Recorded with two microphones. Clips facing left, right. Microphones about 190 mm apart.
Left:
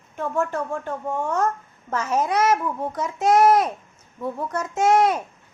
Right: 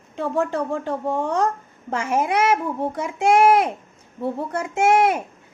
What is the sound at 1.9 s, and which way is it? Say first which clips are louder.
A woman's voice: right 1 dB; 10° right (ahead or behind).